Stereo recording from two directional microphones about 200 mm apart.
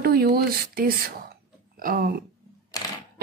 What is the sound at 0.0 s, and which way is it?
A woman's voice, 50° right (ahead or behind).